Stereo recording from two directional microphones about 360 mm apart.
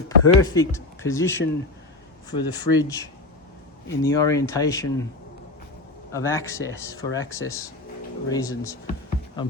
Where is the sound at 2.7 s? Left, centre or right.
Left.